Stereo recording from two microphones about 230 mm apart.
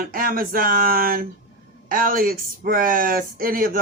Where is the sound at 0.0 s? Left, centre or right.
Right.